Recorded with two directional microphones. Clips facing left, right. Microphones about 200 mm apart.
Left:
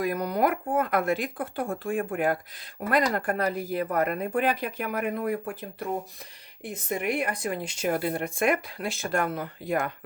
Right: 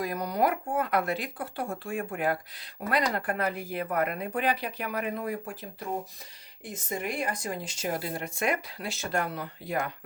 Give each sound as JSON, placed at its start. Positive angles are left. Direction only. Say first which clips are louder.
{"t": 0.0, "sound": "speech", "louder": "left 2 dB", "side_deg": 55}
{"t": 6.8, "sound": "speech", "louder": "left 4 dB", "side_deg": 60}